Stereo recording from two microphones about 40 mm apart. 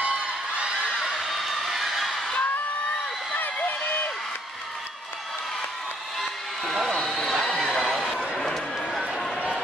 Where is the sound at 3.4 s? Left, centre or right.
Left.